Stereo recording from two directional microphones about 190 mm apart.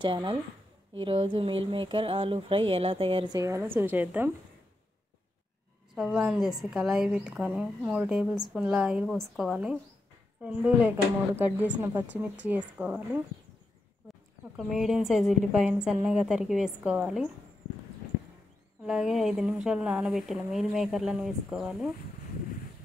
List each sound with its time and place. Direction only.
0.0 s speech: 25° right (ahead or behind)
3.3 s a woman's voice: 15° right (ahead or behind)
5.9 s a woman's voice: 5° right (ahead or behind)
14.6 s a woman's voice: 5° right (ahead or behind)
18.9 s a woman's voice: 5° right (ahead or behind)